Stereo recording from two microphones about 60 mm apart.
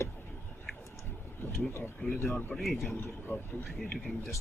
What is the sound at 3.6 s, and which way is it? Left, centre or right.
Speech, centre.